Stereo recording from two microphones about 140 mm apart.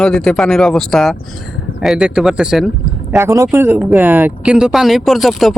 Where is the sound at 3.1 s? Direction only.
20° right (ahead or behind).